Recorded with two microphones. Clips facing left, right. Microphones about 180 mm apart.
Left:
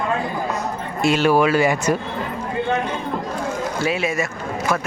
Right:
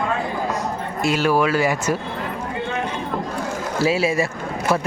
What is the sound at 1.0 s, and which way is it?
Speech, 5° right (ahead or behind).